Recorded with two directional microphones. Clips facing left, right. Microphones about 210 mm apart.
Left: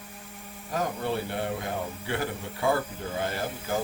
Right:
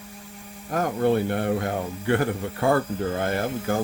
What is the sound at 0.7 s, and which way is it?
A man's voice, 55° right (ahead or behind).